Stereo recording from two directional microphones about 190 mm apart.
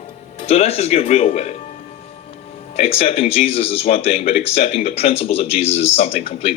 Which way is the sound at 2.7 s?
35° left (ahead or behind).